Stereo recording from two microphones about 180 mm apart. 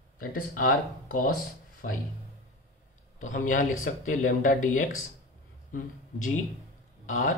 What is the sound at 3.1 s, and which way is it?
Speech, 45° left (ahead or behind).